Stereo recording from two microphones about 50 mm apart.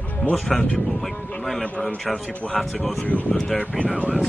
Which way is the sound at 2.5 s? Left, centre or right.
Centre.